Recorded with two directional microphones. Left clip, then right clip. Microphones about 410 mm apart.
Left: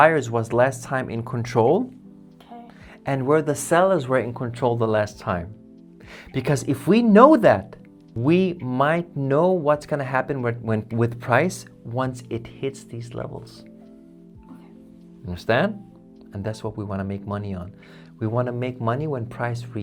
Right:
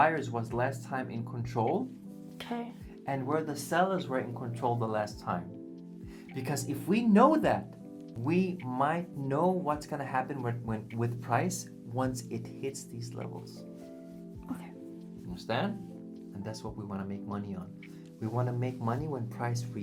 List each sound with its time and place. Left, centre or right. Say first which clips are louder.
0.0 s speech: left 11 dB; left
3.1 s speech: left 12 dB; left
15.4 s speech: left 13 dB; left
16.3 s speech: left 12 dB; left